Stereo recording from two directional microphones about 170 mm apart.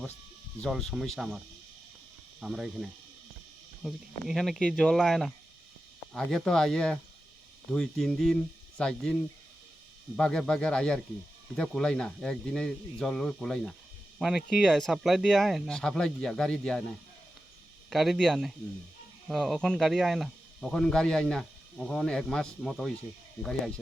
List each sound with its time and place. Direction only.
0.6 s speech: centre (ahead or behind)
2.4 s speech: centre (ahead or behind)
10.2 s speech: 5° left (ahead or behind)
17.8 s speech: centre (ahead or behind)